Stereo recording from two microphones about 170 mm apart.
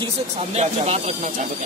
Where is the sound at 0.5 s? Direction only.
40° right (ahead or behind).